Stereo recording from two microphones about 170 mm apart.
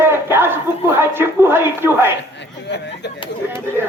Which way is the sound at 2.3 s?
85° left.